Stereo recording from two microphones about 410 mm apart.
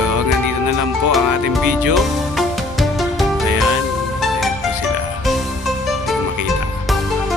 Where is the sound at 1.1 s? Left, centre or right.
Centre.